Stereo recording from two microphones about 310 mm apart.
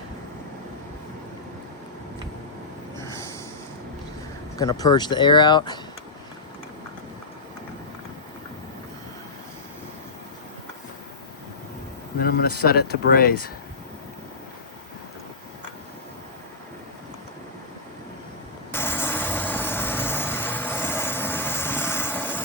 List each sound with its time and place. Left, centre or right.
4.5 s speech: centre
12.2 s speech: left
18.7 s vehicle: centre